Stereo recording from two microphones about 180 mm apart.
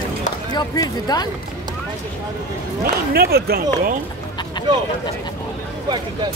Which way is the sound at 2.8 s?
60° right (ahead or behind).